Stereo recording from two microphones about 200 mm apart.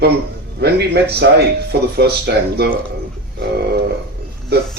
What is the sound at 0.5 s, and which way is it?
Speech, 55° right (ahead or behind).